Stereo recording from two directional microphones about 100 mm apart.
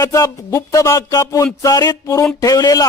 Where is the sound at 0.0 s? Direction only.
30° left (ahead or behind).